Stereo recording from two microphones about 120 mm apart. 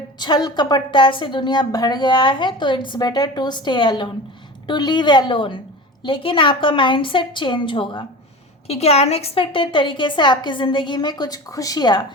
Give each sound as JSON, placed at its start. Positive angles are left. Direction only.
{"t": 0.2, "sound": "a woman's voice", "side_deg": 35}
{"t": 8.6, "sound": "a woman's voice", "side_deg": 60}